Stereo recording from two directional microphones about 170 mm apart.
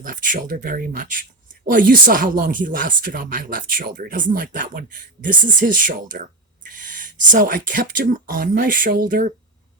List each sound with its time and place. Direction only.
0.0 s speech: 55° right (ahead or behind)